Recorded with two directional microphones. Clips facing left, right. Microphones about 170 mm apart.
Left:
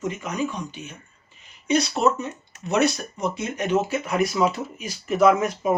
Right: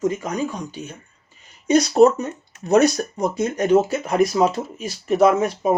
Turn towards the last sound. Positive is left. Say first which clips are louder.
# right 2 dB
turn(degrees=-35)  # may be behind; listen again after turning